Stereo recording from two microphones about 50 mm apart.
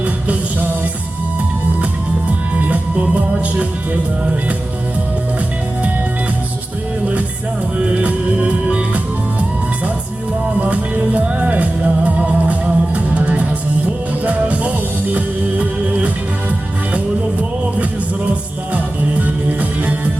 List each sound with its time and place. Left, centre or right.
7.8 s music: right
10.6 s music: right
15.9 s music: right
19.5 s music: right